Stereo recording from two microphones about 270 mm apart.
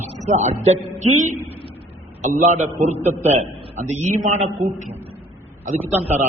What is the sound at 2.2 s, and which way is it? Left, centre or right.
A man's voice, right.